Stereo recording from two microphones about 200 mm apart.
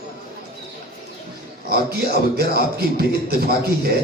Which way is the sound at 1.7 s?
50° right (ahead or behind).